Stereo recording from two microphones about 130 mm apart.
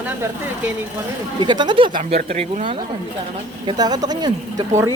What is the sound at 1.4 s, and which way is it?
Speech, 35° right (ahead or behind).